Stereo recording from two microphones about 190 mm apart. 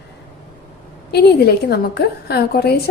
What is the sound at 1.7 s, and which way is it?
A woman's voice, 60° left (ahead or behind).